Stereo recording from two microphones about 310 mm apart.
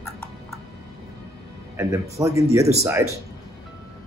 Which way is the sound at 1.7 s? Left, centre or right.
Centre.